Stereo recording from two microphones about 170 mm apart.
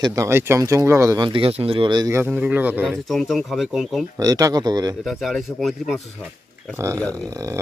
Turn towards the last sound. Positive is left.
turn(degrees=-20)  # may be behind; listen again after turning